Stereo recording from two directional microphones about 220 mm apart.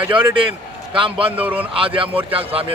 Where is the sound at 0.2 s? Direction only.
25° right (ahead or behind).